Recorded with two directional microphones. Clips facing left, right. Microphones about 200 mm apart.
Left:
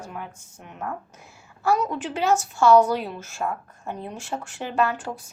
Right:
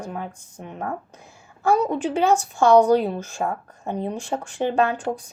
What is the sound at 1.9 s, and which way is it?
Speech, 15° right (ahead or behind).